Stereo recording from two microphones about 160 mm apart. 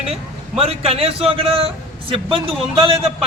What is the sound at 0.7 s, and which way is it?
A man's voice, 40° right (ahead or behind).